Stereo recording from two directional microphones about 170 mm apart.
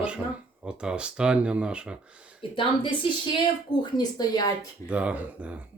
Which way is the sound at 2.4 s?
30° left (ahead or behind).